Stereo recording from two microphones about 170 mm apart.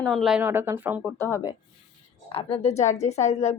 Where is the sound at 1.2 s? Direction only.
20° left (ahead or behind).